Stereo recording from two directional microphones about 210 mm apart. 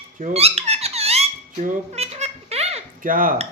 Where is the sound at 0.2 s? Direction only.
35° right (ahead or behind).